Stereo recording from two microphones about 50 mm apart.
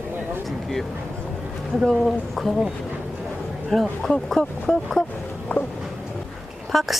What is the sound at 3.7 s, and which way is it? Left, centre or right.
Speech, centre.